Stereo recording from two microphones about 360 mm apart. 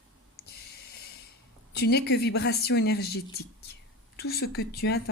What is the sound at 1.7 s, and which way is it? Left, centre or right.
Speech, left.